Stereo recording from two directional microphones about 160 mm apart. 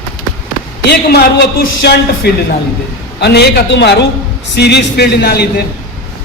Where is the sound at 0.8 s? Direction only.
90° left.